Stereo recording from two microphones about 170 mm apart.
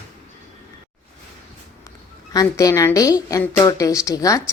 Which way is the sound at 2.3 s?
20° left (ahead or behind).